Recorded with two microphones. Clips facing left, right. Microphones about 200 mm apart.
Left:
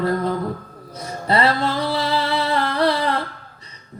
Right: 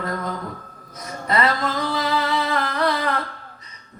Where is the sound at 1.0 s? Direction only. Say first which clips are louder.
Left 3 dB; 30° left (ahead or behind).